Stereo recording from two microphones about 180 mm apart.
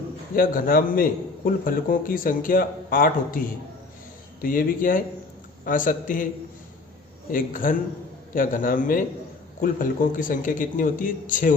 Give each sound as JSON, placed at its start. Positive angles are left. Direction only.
{"t": 0.3, "sound": "a man's voice", "side_deg": 50}
{"t": 4.4, "sound": "a man's voice", "side_deg": 50}
{"t": 7.3, "sound": "a man's voice", "side_deg": 50}